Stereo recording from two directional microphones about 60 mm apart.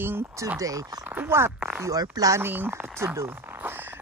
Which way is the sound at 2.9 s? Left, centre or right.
Right.